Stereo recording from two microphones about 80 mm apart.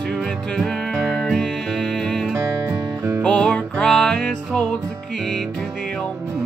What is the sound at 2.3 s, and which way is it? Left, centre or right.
Music, right.